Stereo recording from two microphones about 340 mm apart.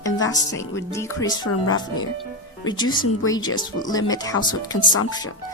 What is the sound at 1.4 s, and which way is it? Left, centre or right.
Speech, left.